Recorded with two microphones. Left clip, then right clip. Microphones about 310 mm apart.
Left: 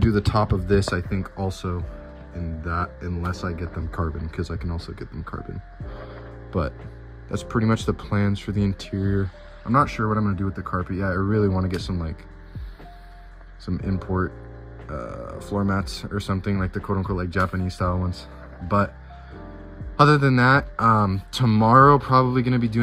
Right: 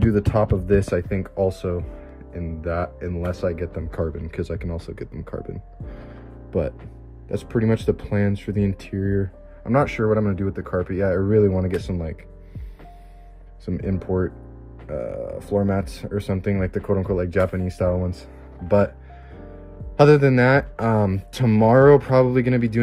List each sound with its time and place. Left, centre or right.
0.0 s speech: centre
7.2 s speech: centre
13.7 s speech: centre
20.0 s speech: centre